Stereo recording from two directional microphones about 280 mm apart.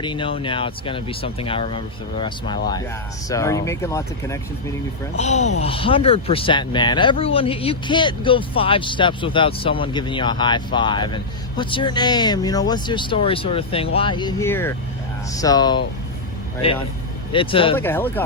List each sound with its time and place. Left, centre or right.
0.0 s speech: centre
5.1 s speech: left
17.3 s speech: centre
17.7 s speech: centre